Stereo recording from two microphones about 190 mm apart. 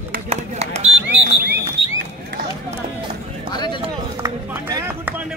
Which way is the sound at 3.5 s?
20° left (ahead or behind).